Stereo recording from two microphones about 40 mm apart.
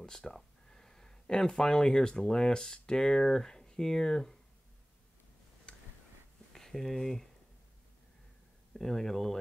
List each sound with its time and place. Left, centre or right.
0.3 s a sound: centre
1.2 s speech: left
5.7 s tick-tock: left
6.5 s speech: centre
8.7 s speech: centre